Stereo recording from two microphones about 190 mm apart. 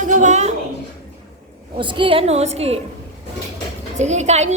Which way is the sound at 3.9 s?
35° right (ahead or behind).